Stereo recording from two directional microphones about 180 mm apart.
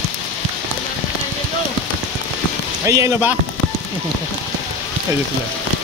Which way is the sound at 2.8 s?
15° right (ahead or behind).